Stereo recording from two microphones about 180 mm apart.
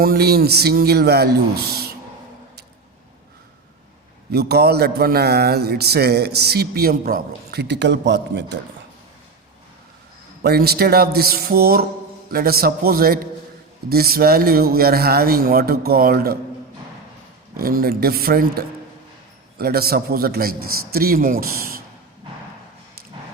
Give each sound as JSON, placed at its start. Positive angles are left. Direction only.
{"t": 0.0, "sound": "a man's voice", "side_deg": -60}
{"t": 4.3, "sound": "a man's voice", "side_deg": -60}
{"t": 10.4, "sound": "a man's voice", "side_deg": -60}
{"t": 17.6, "sound": "a man's voice", "side_deg": -55}